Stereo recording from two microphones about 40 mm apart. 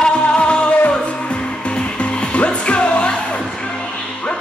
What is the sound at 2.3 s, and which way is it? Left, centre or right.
Music, left.